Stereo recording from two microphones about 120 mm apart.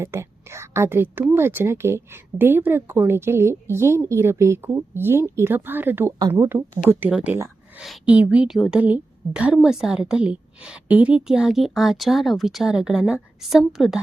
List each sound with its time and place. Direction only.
0.0 s speech: 20° right (ahead or behind)
7.1 s a woman's voice: 5° right (ahead or behind)